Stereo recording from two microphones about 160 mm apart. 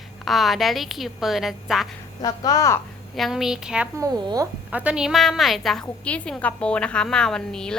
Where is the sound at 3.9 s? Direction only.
25° right (ahead or behind).